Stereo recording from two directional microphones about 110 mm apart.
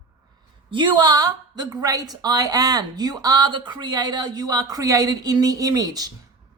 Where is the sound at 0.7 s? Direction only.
45° right (ahead or behind).